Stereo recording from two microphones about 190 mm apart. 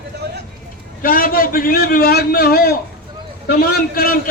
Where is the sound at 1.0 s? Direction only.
50° left (ahead or behind).